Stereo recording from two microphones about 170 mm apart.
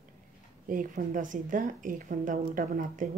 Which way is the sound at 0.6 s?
50° right (ahead or behind).